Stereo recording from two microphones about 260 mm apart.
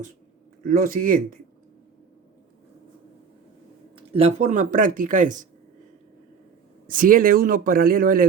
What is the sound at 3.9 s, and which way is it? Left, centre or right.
Speech, right.